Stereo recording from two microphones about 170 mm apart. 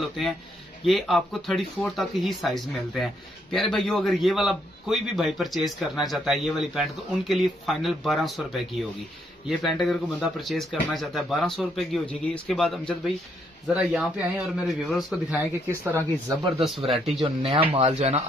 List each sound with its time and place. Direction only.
0.8 s a man's voice: centre (ahead or behind)
15.7 s speech: 15° right (ahead or behind)
16.9 s a man's voice: centre (ahead or behind)
17.2 s speech: 30° right (ahead or behind)